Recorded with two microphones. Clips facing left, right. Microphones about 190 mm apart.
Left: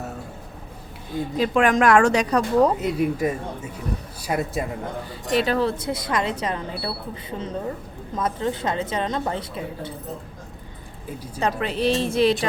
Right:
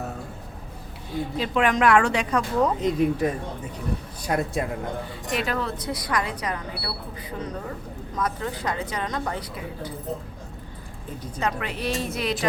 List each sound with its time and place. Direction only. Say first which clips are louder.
1.4 s speech: left 4 dB; 45° left (ahead or behind)
2.8 s speech: even; 5° left (ahead or behind)
5.3 s speech: left 6 dB; 30° left (ahead or behind)
11.3 s speech: left 5 dB; 30° left (ahead or behind)